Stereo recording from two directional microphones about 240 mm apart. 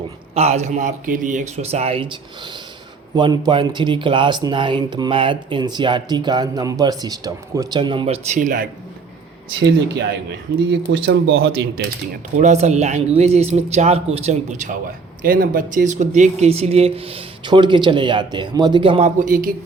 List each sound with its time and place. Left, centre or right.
0.3 s speech: right
3.2 s speech: centre
9.6 s speech: right